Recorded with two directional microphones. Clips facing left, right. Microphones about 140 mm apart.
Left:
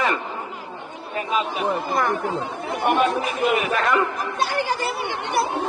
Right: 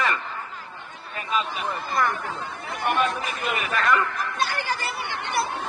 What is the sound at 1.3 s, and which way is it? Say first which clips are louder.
Speech: left 4 dB; 15° left (ahead or behind).